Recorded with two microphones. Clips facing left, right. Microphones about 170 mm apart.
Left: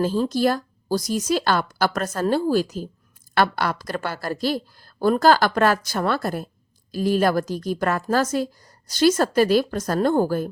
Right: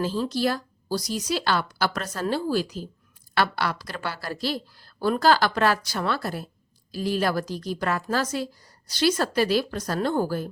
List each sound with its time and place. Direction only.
0.0 s a woman's voice: 45° left (ahead or behind)